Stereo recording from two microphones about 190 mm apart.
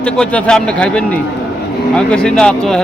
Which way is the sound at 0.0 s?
5° left (ahead or behind).